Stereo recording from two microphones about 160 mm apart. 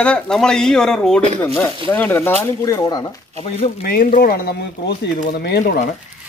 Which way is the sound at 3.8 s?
65° left (ahead or behind).